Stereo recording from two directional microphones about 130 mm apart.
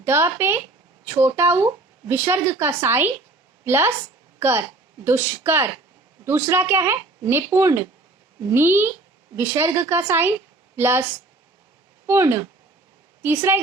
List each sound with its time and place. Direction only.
0.0 s a woman's voice: 20° right (ahead or behind)
12.0 s a woman's voice: 20° right (ahead or behind)